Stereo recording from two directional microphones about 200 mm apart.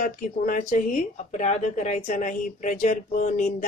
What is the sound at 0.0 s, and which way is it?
Speech, 40° left (ahead or behind).